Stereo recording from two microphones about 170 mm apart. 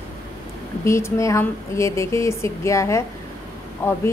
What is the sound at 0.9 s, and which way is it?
A woman's voice, 15° left (ahead or behind).